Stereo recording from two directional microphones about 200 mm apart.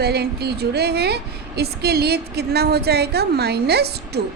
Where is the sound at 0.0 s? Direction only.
55° right (ahead or behind).